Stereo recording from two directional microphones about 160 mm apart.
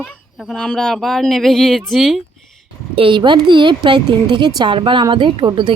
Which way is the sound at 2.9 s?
30° right (ahead or behind).